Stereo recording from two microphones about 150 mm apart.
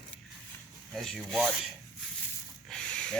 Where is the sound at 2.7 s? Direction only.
5° left (ahead or behind).